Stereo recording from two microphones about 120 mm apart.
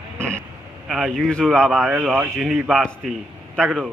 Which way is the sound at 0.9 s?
Centre (ahead or behind).